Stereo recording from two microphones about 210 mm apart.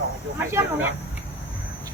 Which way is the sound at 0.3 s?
10° right (ahead or behind).